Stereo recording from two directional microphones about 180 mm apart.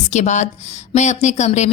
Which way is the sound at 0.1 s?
40° left (ahead or behind).